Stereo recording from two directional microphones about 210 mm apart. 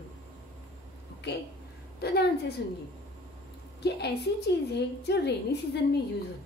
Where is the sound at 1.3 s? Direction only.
55° left (ahead or behind).